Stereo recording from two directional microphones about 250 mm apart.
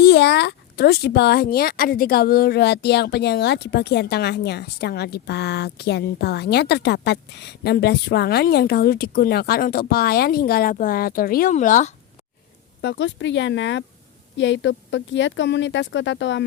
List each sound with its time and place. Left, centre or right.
0.0 s speech: left
12.8 s speech: left